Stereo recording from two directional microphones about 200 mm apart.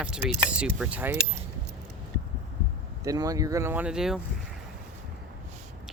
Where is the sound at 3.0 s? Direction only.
15° right (ahead or behind).